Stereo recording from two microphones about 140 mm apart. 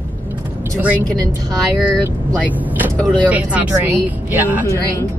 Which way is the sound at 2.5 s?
10° right (ahead or behind).